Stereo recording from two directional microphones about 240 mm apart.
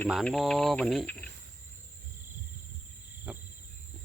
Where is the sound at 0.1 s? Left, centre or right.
Centre.